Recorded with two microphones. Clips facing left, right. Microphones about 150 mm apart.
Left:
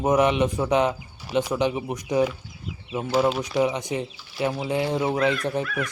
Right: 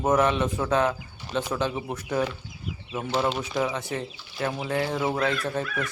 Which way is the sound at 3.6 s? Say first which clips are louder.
Left 4 dB; 15° left (ahead or behind).